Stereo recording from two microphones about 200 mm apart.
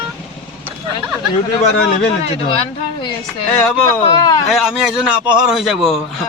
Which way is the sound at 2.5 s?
25° left (ahead or behind).